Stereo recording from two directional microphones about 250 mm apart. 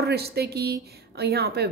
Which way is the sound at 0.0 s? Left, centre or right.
Right.